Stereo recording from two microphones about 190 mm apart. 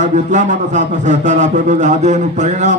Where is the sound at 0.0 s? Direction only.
40° right (ahead or behind).